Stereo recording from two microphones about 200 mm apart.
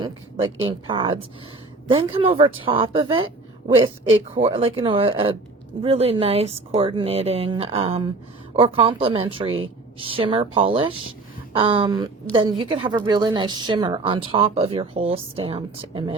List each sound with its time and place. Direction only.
0.0 s a sound: 25° right (ahead or behind)
0.6 s a woman's voice: 25° right (ahead or behind)
4.4 s a woman's voice: 30° right (ahead or behind)